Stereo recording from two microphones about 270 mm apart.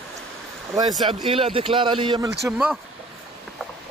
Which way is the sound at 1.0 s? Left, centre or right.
Centre.